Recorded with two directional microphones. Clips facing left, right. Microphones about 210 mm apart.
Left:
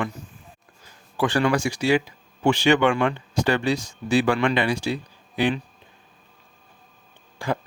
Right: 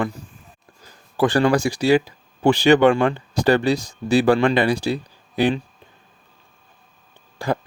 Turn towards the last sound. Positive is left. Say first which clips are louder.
# right 3 dB
turn(degrees=-35)  # may be behind; listen again after turning